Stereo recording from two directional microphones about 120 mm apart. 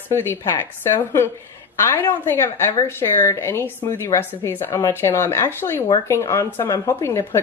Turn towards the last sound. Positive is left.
turn(degrees=20)  # may be behind; listen again after turning